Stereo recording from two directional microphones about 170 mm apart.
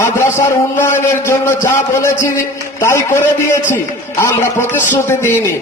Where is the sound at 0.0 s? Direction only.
15° left (ahead or behind).